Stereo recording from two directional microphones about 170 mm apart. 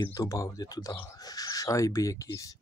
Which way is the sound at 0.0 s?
20° left (ahead or behind).